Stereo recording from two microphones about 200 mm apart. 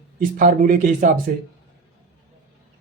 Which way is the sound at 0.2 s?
40° right (ahead or behind).